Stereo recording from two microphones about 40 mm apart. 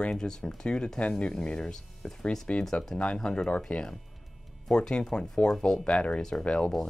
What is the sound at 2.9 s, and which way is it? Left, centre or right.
Speech, left.